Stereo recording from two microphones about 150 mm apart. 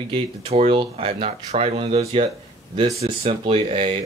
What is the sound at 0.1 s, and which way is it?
Speech, 40° right (ahead or behind).